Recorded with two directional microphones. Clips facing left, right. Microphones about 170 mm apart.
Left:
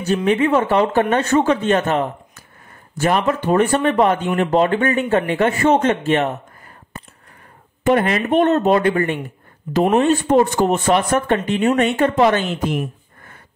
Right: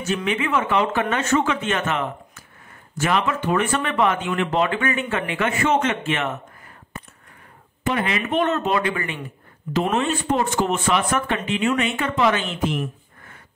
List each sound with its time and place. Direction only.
0.0 s speech: 35° left (ahead or behind)
7.8 s speech: 50° left (ahead or behind)